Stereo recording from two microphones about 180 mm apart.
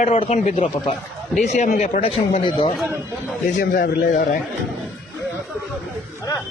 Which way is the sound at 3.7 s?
50° left (ahead or behind).